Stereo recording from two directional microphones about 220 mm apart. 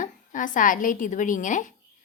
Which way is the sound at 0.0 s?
35° left (ahead or behind).